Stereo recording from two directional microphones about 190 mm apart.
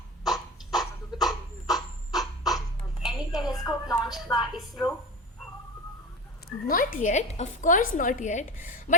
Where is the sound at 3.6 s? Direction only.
20° left (ahead or behind).